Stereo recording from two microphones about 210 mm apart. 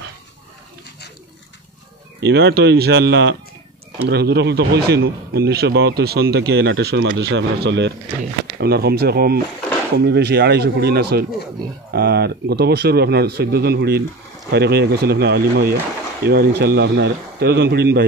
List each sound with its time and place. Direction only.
2.1 s speech: 55° right (ahead or behind)